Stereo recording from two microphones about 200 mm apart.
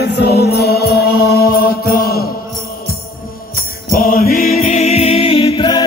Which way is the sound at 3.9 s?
45° left (ahead or behind).